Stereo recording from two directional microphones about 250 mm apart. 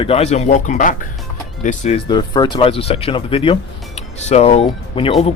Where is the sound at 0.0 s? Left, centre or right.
Left.